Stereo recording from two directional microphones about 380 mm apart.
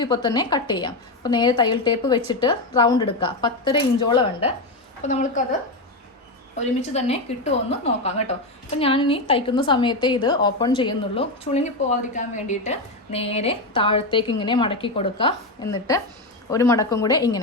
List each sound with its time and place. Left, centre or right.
0.0 s a woman's voice: centre
6.9 s a woman's voice: centre